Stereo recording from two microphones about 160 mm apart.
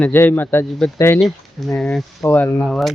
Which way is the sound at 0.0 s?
10° left (ahead or behind).